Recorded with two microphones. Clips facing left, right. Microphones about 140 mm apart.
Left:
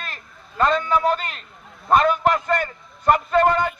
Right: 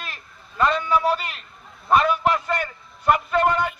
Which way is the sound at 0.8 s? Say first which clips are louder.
Even; 45° left (ahead or behind).